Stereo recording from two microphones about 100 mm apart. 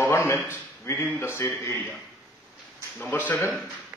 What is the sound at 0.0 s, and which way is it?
A man's voice, 25° left (ahead or behind).